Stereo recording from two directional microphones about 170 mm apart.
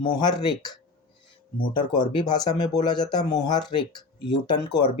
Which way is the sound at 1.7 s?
25° left (ahead or behind).